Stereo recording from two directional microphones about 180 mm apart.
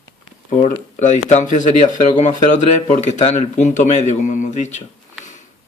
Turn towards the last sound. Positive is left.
turn(degrees=40)  # may be behind; listen again after turning